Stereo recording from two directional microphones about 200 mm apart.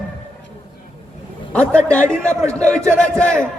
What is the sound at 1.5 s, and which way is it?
A man's voice, 5° left (ahead or behind).